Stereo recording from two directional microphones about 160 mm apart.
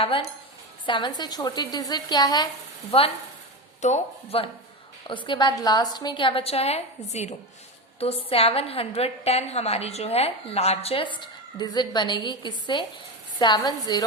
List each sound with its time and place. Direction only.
0.9 s a woman's voice: 30° left (ahead or behind)
3.8 s speech: 50° left (ahead or behind)
5.0 s a woman's voice: 30° left (ahead or behind)